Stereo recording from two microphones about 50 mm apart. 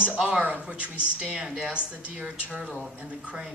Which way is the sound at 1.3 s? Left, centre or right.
Centre.